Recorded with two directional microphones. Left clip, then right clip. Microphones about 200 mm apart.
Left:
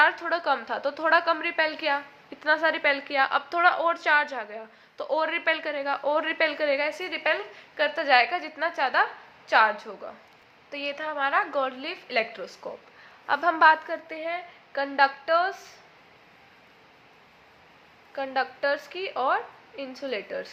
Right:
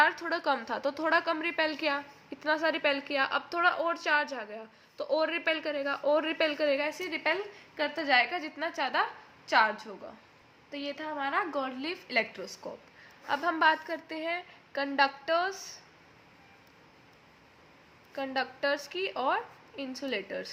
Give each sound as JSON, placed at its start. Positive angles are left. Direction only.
{"t": 0.0, "sound": "a woman's voice", "side_deg": -15}
{"t": 13.2, "sound": "a woman's voice", "side_deg": -5}
{"t": 18.1, "sound": "a woman's voice", "side_deg": -15}